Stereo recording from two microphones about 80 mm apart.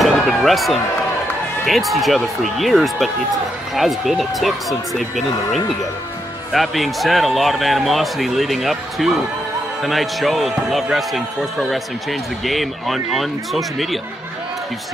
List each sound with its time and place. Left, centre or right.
0.0 s slam: centre
1.7 s speech: centre